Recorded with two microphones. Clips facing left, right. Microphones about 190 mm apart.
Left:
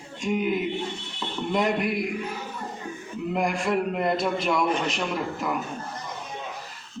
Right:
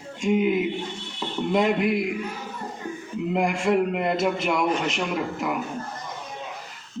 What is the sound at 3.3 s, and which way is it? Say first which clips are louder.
A man's voice: right 3 dB; 20° right (ahead or behind).